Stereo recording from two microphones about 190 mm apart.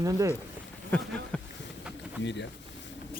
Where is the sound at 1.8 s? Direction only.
5° right (ahead or behind).